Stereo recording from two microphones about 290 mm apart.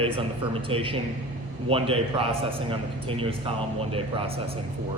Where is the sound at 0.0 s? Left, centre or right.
Centre.